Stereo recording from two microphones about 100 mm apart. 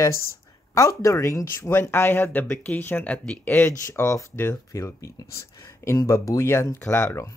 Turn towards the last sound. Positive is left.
turn(degrees=30)  # may be behind; listen again after turning